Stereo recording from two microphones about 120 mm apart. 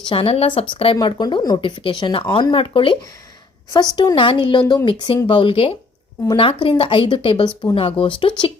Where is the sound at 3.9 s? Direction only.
40° left (ahead or behind).